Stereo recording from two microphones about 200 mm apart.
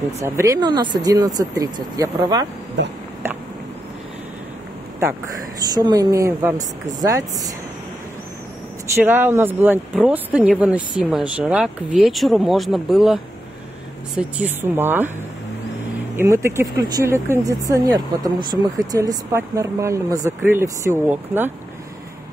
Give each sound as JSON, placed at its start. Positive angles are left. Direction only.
{"t": 0.2, "sound": "speech", "side_deg": -15}
{"t": 5.6, "sound": "speech", "side_deg": -20}
{"t": 8.9, "sound": "speech", "side_deg": -10}
{"t": 16.2, "sound": "speech", "side_deg": -15}